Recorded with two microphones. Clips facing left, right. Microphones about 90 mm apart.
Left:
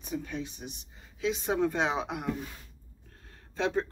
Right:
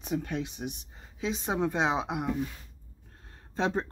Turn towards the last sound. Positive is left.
turn(degrees=-30)  # may be behind; listen again after turning